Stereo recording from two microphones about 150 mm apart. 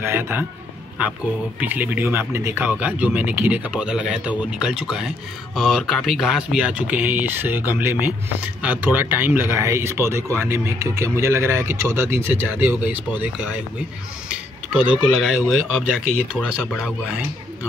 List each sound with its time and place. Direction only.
0.0 s speech: 15° right (ahead or behind)
16.3 s speech: 5° left (ahead or behind)